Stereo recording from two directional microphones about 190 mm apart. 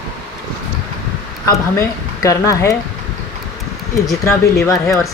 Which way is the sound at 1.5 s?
15° left (ahead or behind).